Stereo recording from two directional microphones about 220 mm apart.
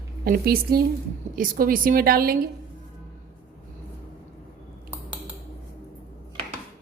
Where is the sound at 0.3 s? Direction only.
45° right (ahead or behind).